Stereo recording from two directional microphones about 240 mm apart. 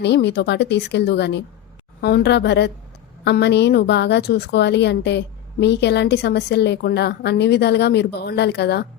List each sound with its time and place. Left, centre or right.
0.0 s a woman's voice: left